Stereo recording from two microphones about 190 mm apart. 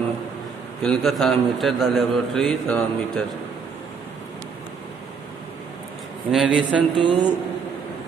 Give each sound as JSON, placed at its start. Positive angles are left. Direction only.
{"t": 0.8, "sound": "a man's voice", "side_deg": 0}
{"t": 6.3, "sound": "a man's voice", "side_deg": -5}
{"t": 7.0, "sound": "speech", "side_deg": -25}